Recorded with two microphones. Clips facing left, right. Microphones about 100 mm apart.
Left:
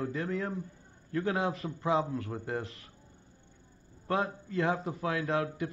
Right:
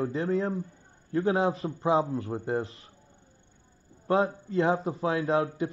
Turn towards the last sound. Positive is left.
turn(degrees=-30)  # may be behind; listen again after turning